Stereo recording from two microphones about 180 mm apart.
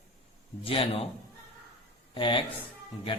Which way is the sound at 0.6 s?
30° left (ahead or behind).